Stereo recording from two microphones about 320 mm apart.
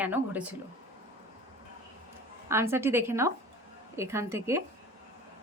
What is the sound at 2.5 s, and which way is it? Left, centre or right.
A woman's voice, centre.